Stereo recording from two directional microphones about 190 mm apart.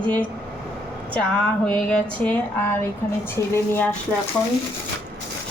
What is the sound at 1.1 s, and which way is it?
Speech, 5° left (ahead or behind).